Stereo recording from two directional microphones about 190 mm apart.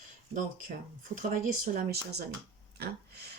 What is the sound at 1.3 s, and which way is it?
Speech, 55° right (ahead or behind).